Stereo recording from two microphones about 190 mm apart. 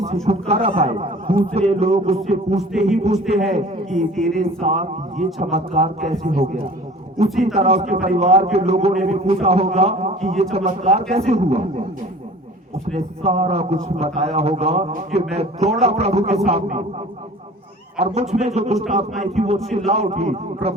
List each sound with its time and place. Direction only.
0.3 s a man's voice: 30° right (ahead or behind)
4.1 s speech: centre (ahead or behind)
4.4 s a man's voice: 35° right (ahead or behind)
7.5 s a man's voice: 35° right (ahead or behind)
13.2 s a man's voice: 30° right (ahead or behind)
18.0 s a man's voice: 35° right (ahead or behind)